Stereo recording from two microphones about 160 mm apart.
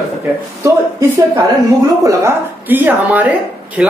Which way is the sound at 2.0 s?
15° right (ahead or behind).